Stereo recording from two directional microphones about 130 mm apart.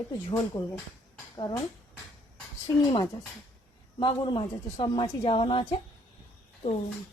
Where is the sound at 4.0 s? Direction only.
35° left (ahead or behind).